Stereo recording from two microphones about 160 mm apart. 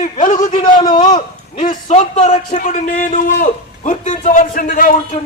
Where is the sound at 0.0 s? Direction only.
55° left (ahead or behind).